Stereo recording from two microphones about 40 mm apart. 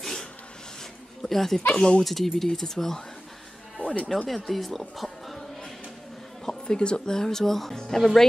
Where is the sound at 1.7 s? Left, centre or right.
Left.